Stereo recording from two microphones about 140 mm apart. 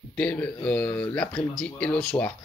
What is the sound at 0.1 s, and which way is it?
Speech, 10° left (ahead or behind).